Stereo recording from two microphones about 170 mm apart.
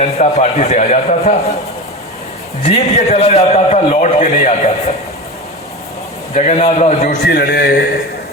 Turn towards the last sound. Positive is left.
turn(degrees=70)  # may be behind; listen again after turning